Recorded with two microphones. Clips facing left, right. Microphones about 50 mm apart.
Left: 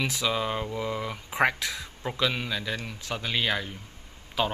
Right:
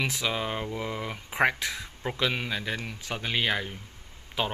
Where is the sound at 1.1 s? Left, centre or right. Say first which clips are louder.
Even; centre.